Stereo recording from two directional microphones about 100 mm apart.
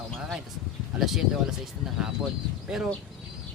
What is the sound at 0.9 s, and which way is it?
Speech, 5° right (ahead or behind).